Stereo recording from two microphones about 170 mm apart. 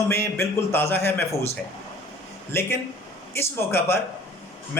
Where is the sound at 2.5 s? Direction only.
15° left (ahead or behind).